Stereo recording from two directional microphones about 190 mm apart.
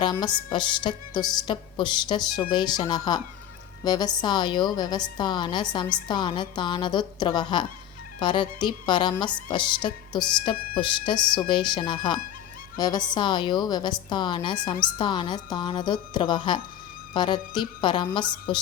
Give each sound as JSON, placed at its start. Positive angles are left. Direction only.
{"t": 0.0, "sound": "speech", "side_deg": 25}